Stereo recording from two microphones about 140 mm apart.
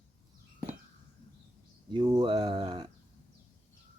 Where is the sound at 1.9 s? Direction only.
30° right (ahead or behind).